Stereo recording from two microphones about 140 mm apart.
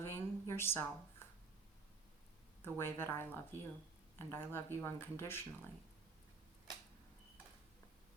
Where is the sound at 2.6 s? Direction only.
15° left (ahead or behind).